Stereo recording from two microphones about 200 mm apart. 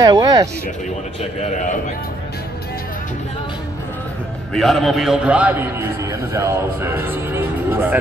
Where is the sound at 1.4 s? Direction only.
40° left (ahead or behind).